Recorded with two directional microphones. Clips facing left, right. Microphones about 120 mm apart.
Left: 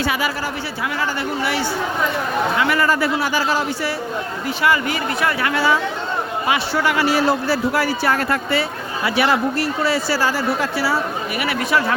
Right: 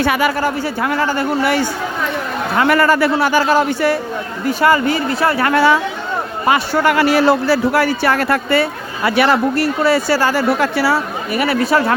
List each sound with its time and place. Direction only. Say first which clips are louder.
0.0 s a man's voice: right 6 dB; 60° right (ahead or behind)
4.4 s speech: right 6 dB; 45° right (ahead or behind)
5.5 s a man's voice: right 7 dB; 60° right (ahead or behind)
6.5 s a man's voice: right 6 dB; 50° right (ahead or behind); by 10.9 s 65° right (ahead or behind)
11.3 s speech: right 6 dB; 40° right (ahead or behind)